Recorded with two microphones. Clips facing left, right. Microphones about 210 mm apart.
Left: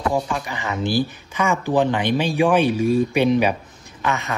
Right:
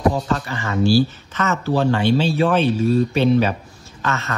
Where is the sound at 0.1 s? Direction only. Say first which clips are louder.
Right 1 dB; 15° left (ahead or behind).